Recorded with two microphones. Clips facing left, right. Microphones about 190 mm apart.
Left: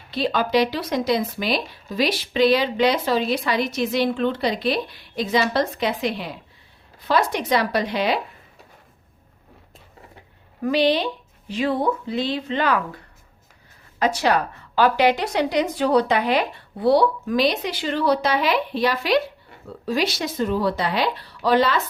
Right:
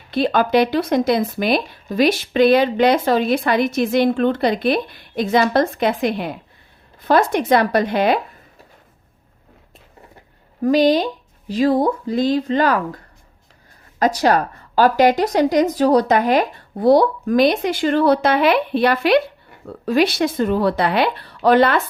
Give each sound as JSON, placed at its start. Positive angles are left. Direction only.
{"t": 0.1, "sound": "speech", "side_deg": -55}
{"t": 10.6, "sound": "speech", "side_deg": -40}
{"t": 14.0, "sound": "speech", "side_deg": -40}